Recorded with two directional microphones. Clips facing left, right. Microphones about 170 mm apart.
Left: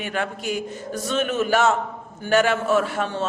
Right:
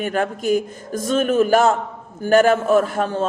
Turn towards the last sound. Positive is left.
turn(degrees=-40)  # may be behind; listen again after turning